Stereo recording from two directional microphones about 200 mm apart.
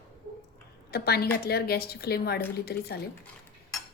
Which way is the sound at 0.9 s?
50° left (ahead or behind).